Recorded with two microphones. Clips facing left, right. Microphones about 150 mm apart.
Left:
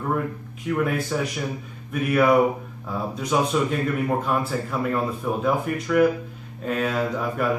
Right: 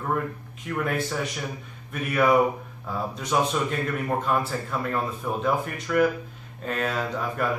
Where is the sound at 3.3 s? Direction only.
5° left (ahead or behind).